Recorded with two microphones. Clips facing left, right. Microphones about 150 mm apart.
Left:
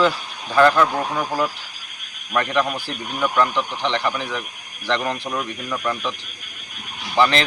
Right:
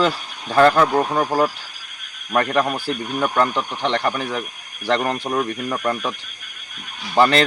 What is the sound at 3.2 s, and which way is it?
Speech, 35° right (ahead or behind).